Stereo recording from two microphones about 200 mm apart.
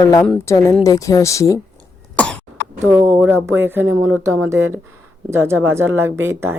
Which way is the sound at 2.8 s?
10° right (ahead or behind).